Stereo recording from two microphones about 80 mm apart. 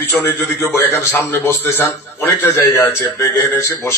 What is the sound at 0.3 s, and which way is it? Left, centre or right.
A man's voice, left.